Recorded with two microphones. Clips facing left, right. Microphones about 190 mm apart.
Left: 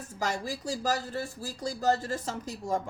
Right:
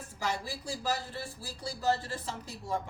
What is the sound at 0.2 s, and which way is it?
Speech, 45° left (ahead or behind).